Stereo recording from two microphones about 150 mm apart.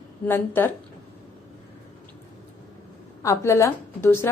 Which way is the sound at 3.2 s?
20° left (ahead or behind).